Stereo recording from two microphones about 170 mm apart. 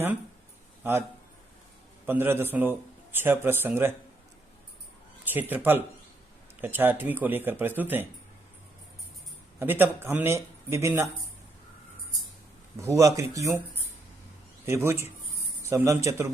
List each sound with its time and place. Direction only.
2.0 s speech: 15° right (ahead or behind)
5.2 s speech: 10° right (ahead or behind)
9.6 s speech: 10° right (ahead or behind)
12.8 s speech: 20° right (ahead or behind)
14.7 s speech: 15° right (ahead or behind)